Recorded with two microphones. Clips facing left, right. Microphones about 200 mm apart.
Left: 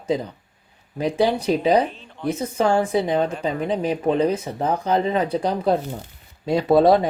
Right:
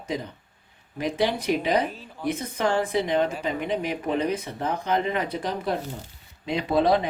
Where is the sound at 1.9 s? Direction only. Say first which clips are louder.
Left 2 dB; 5° right (ahead or behind).